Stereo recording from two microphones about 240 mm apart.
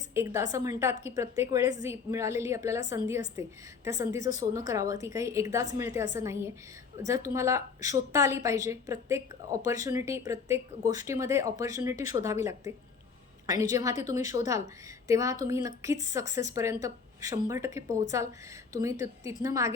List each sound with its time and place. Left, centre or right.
0.1 s a woman's voice: centre